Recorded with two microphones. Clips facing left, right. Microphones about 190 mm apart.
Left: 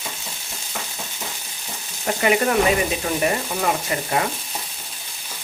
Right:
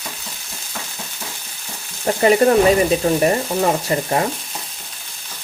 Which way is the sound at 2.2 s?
35° right (ahead or behind).